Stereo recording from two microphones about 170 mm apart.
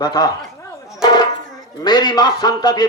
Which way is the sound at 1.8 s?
25° left (ahead or behind).